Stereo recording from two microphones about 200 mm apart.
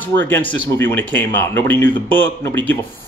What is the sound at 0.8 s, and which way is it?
Speech, 10° left (ahead or behind).